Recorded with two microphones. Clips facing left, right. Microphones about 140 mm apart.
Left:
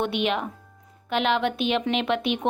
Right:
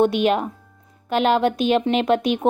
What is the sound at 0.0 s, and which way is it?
A woman's voice, 40° right (ahead or behind).